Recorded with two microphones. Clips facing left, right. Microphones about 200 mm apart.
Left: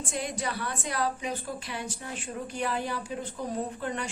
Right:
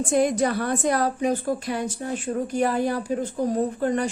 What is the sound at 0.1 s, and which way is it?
A woman's voice, 45° right (ahead or behind).